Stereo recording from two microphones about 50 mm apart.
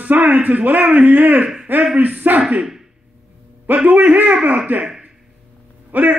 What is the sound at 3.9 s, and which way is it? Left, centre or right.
Speech, right.